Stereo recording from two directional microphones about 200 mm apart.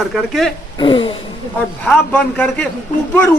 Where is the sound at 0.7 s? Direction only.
25° left (ahead or behind).